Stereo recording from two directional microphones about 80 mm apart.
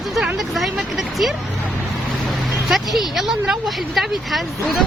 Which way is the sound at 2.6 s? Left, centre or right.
Centre.